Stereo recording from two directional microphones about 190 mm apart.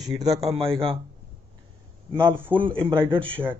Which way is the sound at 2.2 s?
10° right (ahead or behind).